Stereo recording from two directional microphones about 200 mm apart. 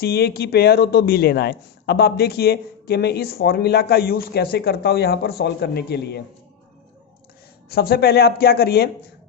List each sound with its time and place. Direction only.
0.0 s a man's voice: 50° left (ahead or behind)
7.7 s a man's voice: 50° left (ahead or behind)